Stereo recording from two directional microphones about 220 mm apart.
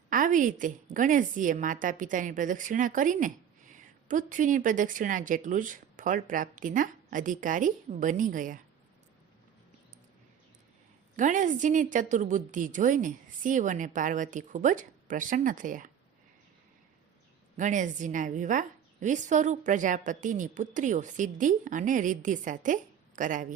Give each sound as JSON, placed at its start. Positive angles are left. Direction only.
{"t": 0.1, "sound": "a woman's voice", "side_deg": -35}
{"t": 11.2, "sound": "a woman's voice", "side_deg": -35}
{"t": 17.6, "sound": "a woman's voice", "side_deg": -35}